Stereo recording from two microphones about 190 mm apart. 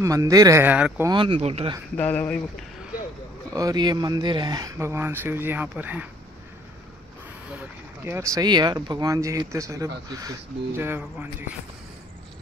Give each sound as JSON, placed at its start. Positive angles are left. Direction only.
{"t": 0.0, "sound": "speech", "side_deg": -15}
{"t": 1.0, "sound": "speech", "side_deg": -25}
{"t": 2.0, "sound": "speech", "side_deg": 10}
{"t": 3.5, "sound": "speech", "side_deg": -20}
{"t": 7.5, "sound": "speech", "side_deg": -10}